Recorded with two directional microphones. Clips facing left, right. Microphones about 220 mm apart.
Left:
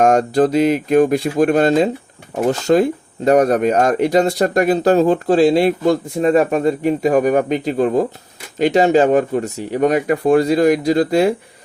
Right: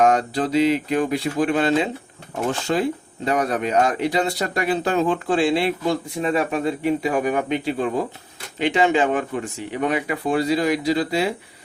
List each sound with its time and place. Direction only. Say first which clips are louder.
0.0 s speech: left 6 dB; 45° left (ahead or behind)